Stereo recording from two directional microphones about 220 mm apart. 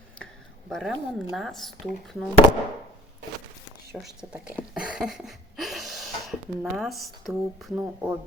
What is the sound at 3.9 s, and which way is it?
Speech, centre (ahead or behind).